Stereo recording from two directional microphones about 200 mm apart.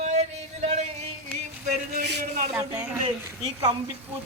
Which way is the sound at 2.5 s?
5° right (ahead or behind).